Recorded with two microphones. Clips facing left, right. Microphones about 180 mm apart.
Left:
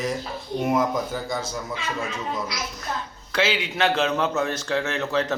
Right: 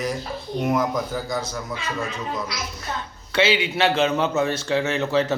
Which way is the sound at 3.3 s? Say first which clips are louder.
Right 4 dB; centre (ahead or behind).